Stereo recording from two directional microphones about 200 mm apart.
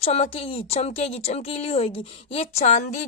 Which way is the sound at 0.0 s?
30° left (ahead or behind).